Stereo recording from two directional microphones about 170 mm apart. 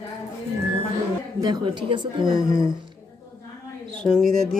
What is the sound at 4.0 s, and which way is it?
Speech, centre (ahead or behind).